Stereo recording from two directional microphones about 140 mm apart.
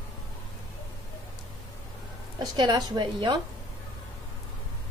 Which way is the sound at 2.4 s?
30° right (ahead or behind).